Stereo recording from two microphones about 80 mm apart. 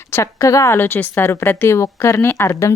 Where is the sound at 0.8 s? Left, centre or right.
Left.